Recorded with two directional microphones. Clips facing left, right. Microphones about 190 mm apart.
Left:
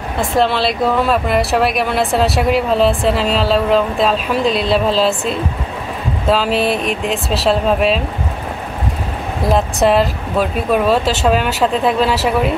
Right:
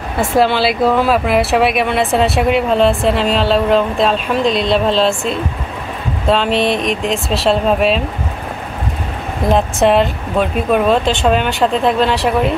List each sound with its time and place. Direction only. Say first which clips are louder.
0.2 s speech: right 2 dB; 5° right (ahead or behind)
9.5 s speech: right 1 dB; centre (ahead or behind)